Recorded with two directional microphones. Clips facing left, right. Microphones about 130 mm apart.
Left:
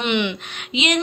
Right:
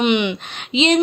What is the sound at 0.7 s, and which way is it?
Speech, 30° right (ahead or behind).